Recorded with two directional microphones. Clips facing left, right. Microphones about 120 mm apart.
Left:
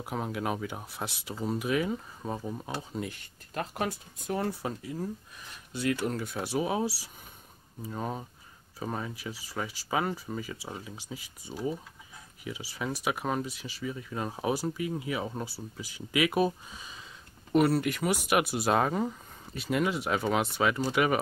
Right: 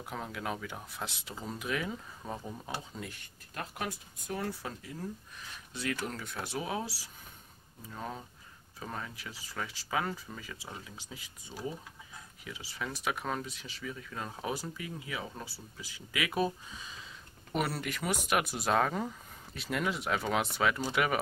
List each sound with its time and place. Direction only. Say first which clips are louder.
0.1 s speech: left 6 dB; 20° left (ahead or behind)
2.9 s speech: left 7 dB; 20° left (ahead or behind)
5.7 s speech: left 6 dB; 5° left (ahead or behind); by 6.9 s 20° left (ahead or behind)
7.9 s speech: left 5 dB; 20° left (ahead or behind)
10.6 s speech: left 5 dB; 5° left (ahead or behind)
15.0 s speech: left 7 dB; 25° left (ahead or behind)
15.4 s speech: left 7 dB; 10° left (ahead or behind)